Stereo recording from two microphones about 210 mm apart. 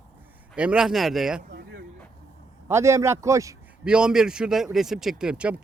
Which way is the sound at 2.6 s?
15° right (ahead or behind).